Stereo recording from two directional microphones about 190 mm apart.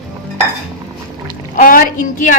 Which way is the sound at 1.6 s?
45° left (ahead or behind).